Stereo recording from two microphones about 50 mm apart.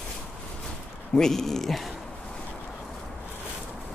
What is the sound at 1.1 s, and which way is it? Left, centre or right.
Speech, centre.